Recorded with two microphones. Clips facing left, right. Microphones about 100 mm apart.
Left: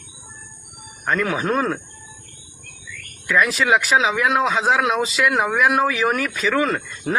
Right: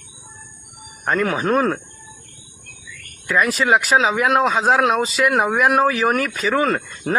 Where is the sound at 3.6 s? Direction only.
15° right (ahead or behind).